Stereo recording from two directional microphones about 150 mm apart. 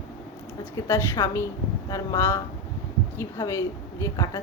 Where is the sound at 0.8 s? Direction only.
20° left (ahead or behind).